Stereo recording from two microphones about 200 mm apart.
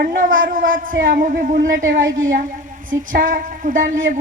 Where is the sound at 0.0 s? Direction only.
45° right (ahead or behind).